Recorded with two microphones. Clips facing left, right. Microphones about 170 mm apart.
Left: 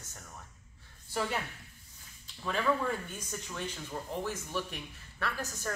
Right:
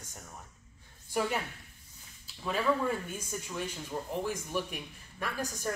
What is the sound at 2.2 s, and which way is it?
Speech, 5° right (ahead or behind).